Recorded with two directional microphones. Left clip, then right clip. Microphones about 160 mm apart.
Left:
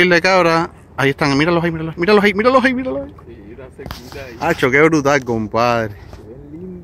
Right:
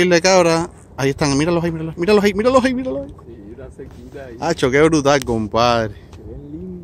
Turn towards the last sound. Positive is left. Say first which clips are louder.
# even
turn(degrees=-5)  # may be behind; listen again after turning